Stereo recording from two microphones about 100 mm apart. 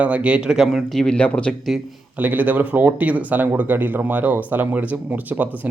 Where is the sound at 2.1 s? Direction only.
15° right (ahead or behind).